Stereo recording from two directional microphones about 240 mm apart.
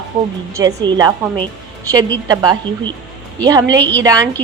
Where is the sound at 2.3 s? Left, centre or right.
Centre.